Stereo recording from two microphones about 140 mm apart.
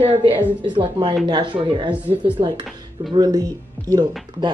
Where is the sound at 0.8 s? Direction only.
30° right (ahead or behind).